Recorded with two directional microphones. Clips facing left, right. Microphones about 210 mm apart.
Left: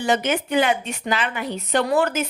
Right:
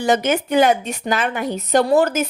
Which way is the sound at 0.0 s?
45° right (ahead or behind).